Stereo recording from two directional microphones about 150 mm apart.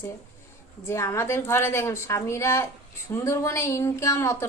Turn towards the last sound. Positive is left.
turn(degrees=20)  # may be behind; listen again after turning